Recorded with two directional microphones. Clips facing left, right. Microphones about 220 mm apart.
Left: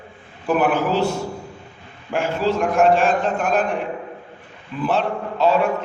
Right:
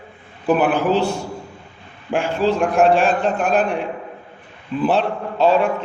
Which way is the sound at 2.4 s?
30° right (ahead or behind).